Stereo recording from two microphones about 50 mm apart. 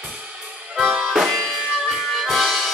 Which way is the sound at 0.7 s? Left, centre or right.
Centre.